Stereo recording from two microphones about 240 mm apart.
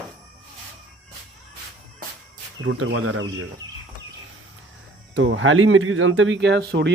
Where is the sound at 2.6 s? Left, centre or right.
Right.